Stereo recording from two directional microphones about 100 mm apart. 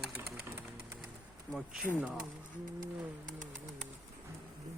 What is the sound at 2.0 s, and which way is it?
Speech, 15° right (ahead or behind).